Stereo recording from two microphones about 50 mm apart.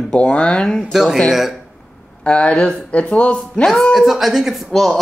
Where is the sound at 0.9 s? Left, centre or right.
Centre.